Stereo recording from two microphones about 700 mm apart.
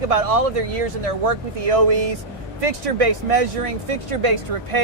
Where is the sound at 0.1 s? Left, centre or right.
Right.